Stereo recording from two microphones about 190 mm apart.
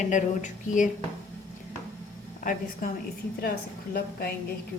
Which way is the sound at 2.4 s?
45° left (ahead or behind).